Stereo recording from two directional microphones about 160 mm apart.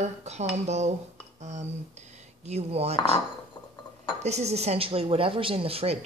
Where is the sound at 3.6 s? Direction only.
25° left (ahead or behind).